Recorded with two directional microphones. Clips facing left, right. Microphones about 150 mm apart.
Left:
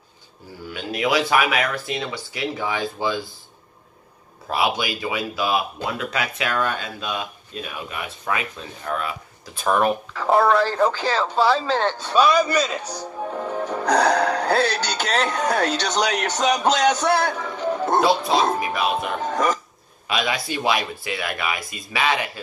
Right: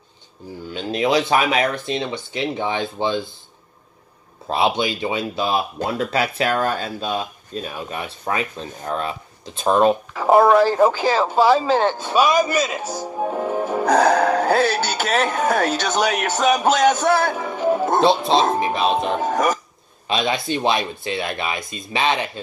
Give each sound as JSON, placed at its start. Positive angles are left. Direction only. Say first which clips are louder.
{"t": 0.7, "sound": "speech", "louder": "right 3 dB", "side_deg": -25}
{"t": 4.5, "sound": "speech", "louder": "right 3 dB", "side_deg": -25}
{"t": 13.2, "sound": "music", "louder": "right 4 dB", "side_deg": -25}
{"t": 13.8, "sound": "music", "louder": "right 3 dB", "side_deg": -45}
{"t": 14.5, "sound": "speech", "louder": "right 3 dB", "side_deg": -10}
{"t": 16.7, "sound": "music", "louder": "right 3 dB", "side_deg": -45}
{"t": 17.3, "sound": "music", "louder": "right 5 dB", "side_deg": -15}
{"t": 18.0, "sound": "speech", "louder": "right 4 dB", "side_deg": -25}
{"t": 19.2, "sound": "speech", "louder": "right 2 dB", "side_deg": -45}
{"t": 20.1, "sound": "speech", "louder": "right 3 dB", "side_deg": -25}